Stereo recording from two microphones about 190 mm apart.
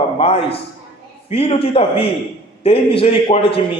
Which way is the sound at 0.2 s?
30° left (ahead or behind).